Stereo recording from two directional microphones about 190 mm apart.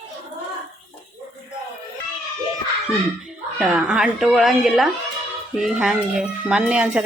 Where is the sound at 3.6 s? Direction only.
5° right (ahead or behind).